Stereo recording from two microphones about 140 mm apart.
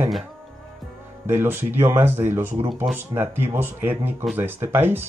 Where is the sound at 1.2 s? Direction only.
15° right (ahead or behind).